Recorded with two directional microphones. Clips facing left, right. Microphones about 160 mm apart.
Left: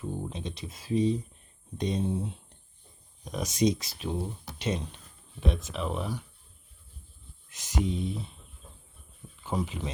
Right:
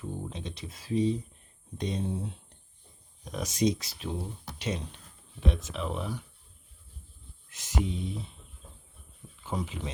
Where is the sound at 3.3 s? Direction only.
15° left (ahead or behind).